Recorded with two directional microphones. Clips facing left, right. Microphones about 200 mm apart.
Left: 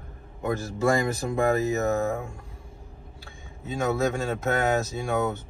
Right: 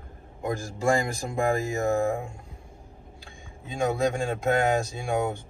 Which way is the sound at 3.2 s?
15° right (ahead or behind).